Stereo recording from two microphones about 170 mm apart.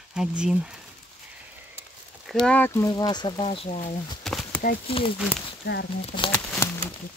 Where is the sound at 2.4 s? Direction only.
10° left (ahead or behind); by 3.9 s 40° left (ahead or behind).